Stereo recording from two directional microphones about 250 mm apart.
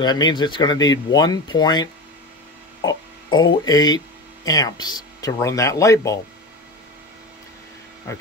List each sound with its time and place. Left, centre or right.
0.0 s speech: centre
2.8 s music: centre
3.6 s speech: centre